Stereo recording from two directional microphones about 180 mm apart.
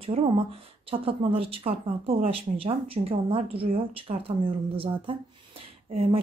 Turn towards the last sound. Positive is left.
turn(degrees=-30)  # may be behind; listen again after turning